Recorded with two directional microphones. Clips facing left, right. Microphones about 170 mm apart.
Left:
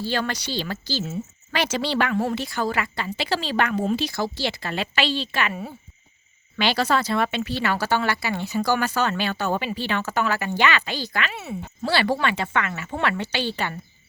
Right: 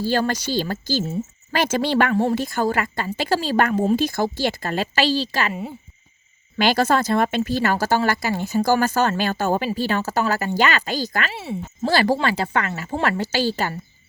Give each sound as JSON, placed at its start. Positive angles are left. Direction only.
{"t": 0.0, "sound": "speech", "side_deg": -45}
{"t": 2.1, "sound": "speech", "side_deg": -40}
{"t": 6.6, "sound": "speech", "side_deg": -45}
{"t": 11.3, "sound": "speech", "side_deg": -30}
{"t": 11.9, "sound": "a woman's voice", "side_deg": -45}